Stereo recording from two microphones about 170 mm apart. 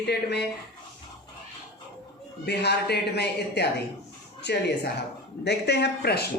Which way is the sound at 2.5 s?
75° left (ahead or behind).